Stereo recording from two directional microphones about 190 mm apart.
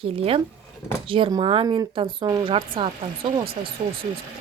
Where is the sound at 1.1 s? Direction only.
25° right (ahead or behind).